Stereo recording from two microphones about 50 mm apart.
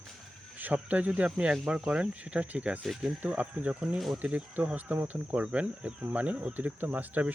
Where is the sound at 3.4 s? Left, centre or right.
Right.